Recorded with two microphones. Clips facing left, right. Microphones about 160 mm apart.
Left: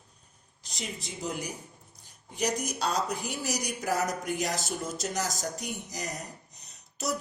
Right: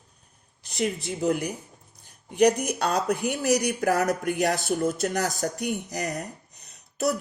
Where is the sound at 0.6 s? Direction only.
60° right (ahead or behind).